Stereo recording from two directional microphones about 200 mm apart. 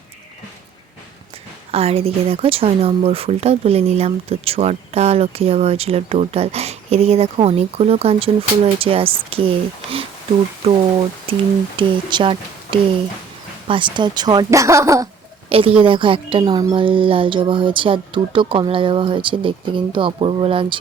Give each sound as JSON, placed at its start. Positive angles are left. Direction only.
{"t": 1.7, "sound": "speech", "side_deg": -30}
{"t": 11.3, "sound": "speech", "side_deg": -25}
{"t": 15.4, "sound": "speech", "side_deg": -30}